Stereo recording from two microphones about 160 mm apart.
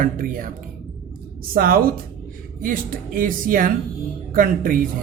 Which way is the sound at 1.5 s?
65° right (ahead or behind).